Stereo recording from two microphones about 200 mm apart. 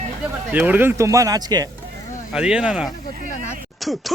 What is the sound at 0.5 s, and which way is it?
Speech, 10° right (ahead or behind).